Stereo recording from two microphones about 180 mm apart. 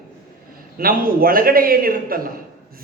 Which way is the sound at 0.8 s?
55° right (ahead or behind).